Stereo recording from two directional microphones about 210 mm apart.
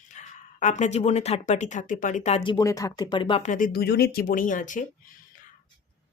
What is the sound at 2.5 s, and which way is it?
Speech, 15° left (ahead or behind).